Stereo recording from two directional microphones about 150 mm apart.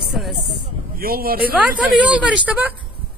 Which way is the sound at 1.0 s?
80° right.